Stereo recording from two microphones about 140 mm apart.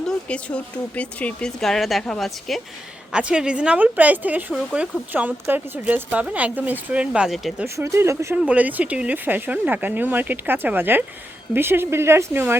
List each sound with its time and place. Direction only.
0.3 s speech: 10° left (ahead or behind)
7.8 s speech: 20° right (ahead or behind)